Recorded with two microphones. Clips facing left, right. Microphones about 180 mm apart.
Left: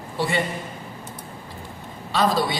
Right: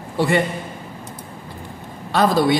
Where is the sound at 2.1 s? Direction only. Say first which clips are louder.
Right 5 dB; 55° right (ahead or behind).